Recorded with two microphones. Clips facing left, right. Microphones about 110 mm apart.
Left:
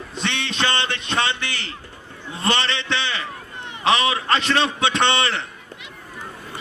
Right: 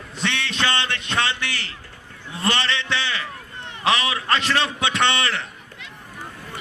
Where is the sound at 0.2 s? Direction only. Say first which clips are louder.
Even; 20° left (ahead or behind).